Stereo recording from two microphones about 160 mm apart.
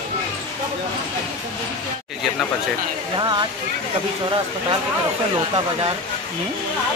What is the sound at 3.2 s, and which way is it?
Speech, 25° right (ahead or behind).